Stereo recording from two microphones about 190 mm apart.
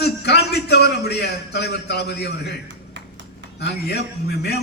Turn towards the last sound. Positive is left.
turn(degrees=60)  # may be behind; listen again after turning